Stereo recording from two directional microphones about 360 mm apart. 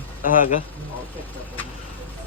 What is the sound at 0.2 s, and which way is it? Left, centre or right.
Speech, left.